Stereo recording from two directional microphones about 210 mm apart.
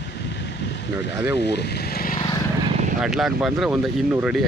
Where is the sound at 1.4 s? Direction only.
50° left (ahead or behind).